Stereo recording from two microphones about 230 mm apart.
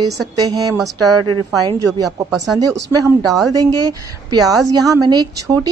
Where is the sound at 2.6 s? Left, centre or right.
Centre.